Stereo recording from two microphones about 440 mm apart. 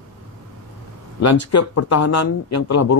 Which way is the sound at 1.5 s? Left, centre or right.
Left.